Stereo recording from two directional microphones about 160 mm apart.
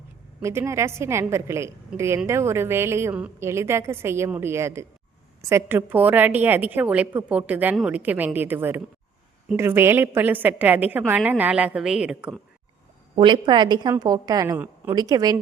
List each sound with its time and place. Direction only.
0.4 s a woman's voice: 15° right (ahead or behind)
13.1 s a woman's voice: 30° right (ahead or behind)